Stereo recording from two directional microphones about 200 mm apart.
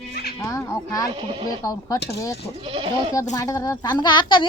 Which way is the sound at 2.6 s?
25° right (ahead or behind).